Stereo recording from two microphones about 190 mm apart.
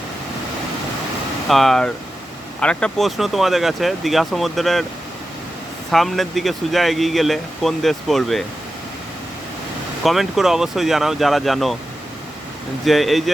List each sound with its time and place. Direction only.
1.5 s speech: centre (ahead or behind)
5.9 s speech: centre (ahead or behind)
10.0 s speech: centre (ahead or behind)
12.8 s speech: centre (ahead or behind)